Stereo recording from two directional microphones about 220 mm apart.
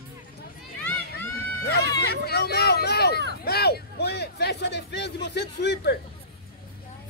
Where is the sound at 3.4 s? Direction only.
45° left (ahead or behind).